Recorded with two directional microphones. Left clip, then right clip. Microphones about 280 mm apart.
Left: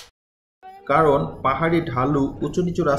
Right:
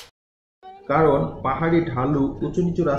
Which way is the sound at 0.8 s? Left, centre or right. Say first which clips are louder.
Left 1 dB; centre.